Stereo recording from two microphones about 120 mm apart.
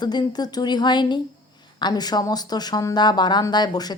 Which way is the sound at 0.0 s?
35° left (ahead or behind).